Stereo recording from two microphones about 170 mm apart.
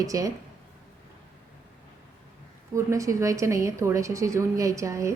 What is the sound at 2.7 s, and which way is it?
A woman's voice, 20° right (ahead or behind).